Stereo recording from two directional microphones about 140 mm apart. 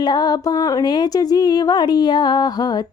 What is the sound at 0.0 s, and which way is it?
Speech, 30° left (ahead or behind).